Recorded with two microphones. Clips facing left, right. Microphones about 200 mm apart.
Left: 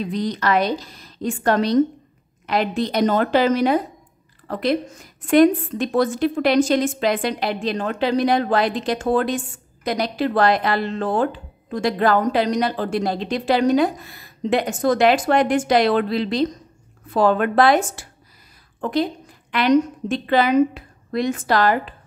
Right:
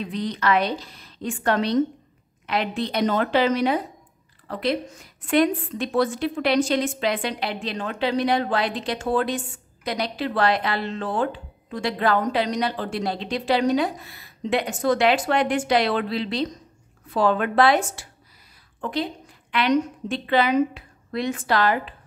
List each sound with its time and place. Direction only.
0.0 s a woman's voice: 40° left (ahead or behind)